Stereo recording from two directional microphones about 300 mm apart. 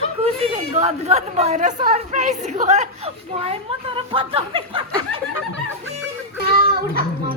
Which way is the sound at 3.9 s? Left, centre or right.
Centre.